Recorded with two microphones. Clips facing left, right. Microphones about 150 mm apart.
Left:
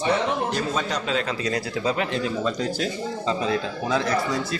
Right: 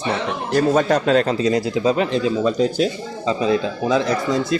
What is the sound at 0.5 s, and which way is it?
Speech, 50° right (ahead or behind).